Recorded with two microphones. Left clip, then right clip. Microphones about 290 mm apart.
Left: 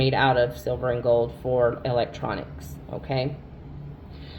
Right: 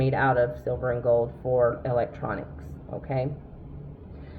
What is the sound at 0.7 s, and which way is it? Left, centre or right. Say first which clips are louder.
Speech: left 2 dB; left.